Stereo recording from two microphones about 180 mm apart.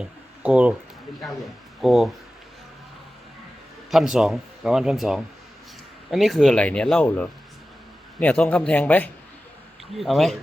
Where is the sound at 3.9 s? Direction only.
5° right (ahead or behind).